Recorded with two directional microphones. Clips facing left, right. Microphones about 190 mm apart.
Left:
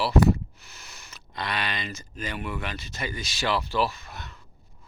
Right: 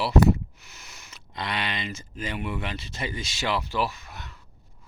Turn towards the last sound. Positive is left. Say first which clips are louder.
# left 2 dB
turn(degrees=-15)  # may be behind; listen again after turning